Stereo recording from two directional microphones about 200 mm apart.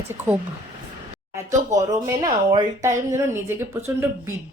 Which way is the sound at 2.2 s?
15° right (ahead or behind).